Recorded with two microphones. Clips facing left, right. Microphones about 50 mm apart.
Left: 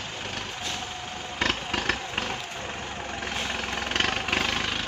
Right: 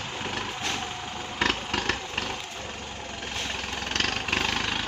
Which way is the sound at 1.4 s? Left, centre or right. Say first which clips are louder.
Right 1 dB; centre.